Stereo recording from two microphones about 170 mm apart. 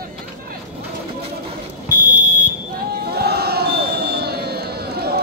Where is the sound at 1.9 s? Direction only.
50° right (ahead or behind).